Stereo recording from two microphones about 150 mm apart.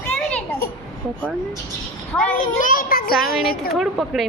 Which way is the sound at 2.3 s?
65° left (ahead or behind).